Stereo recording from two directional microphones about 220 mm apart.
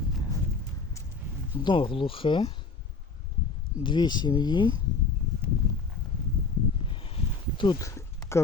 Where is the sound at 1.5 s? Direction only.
20° left (ahead or behind).